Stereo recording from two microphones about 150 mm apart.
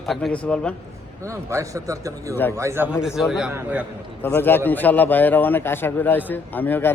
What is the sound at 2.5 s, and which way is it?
Speech, 20° right (ahead or behind).